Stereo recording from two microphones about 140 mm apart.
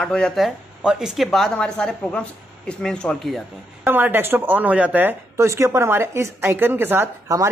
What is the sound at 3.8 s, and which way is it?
Speech, 15° right (ahead or behind).